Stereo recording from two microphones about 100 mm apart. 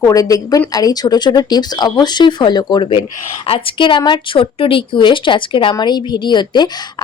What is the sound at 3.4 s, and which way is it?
A woman's voice, 65° left (ahead or behind).